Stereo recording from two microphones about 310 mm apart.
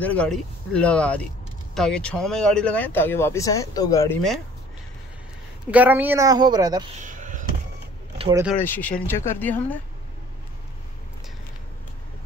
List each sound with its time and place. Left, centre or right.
0.0 s speech: centre
5.7 s a woman's voice: centre
7.0 s a sound: right
8.2 s speech: centre
8.5 s speech: centre